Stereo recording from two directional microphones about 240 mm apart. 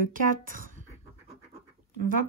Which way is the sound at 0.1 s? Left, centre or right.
Right.